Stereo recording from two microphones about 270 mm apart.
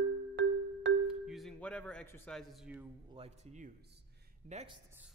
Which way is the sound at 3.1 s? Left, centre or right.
Right.